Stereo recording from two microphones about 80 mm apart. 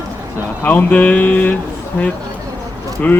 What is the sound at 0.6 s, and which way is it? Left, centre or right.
Speech, left.